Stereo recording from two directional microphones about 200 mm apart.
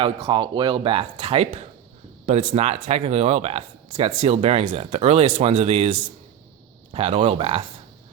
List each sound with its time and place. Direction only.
0.0 s speech: 25° right (ahead or behind)